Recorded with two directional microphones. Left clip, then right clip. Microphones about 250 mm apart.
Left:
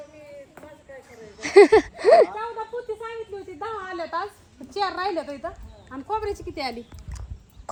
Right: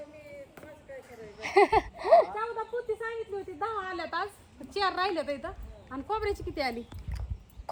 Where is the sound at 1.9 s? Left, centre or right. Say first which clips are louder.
Left 5 dB; left.